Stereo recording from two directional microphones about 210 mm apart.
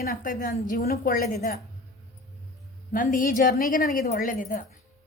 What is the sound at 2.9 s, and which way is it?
A woman's voice, 40° left (ahead or behind).